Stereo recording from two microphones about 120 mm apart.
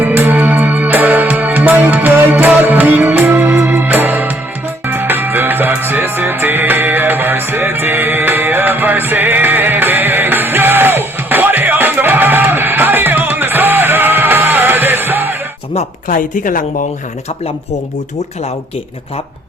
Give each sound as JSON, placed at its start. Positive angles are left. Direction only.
{"t": 0.0, "sound": "music", "side_deg": -15}
{"t": 15.7, "sound": "speech", "side_deg": 75}